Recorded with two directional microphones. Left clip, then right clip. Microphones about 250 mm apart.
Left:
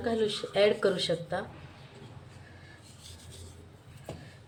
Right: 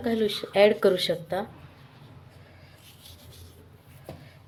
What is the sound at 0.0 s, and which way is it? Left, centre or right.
Speech, right.